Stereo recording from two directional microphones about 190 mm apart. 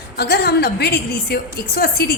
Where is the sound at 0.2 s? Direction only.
55° left (ahead or behind).